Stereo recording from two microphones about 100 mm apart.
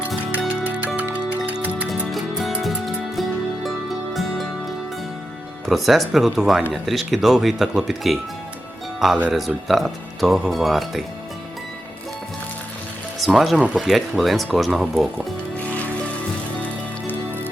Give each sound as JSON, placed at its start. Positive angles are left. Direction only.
{"t": 0.4, "sound": "music", "side_deg": -15}
{"t": 2.0, "sound": "music", "side_deg": 0}
{"t": 5.6, "sound": "speech", "side_deg": 0}
{"t": 13.1, "sound": "speech", "side_deg": 0}
{"t": 15.5, "sound": "music", "side_deg": 15}